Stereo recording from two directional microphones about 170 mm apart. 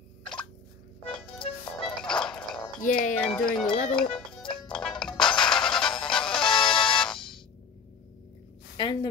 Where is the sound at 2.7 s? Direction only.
50° left (ahead or behind).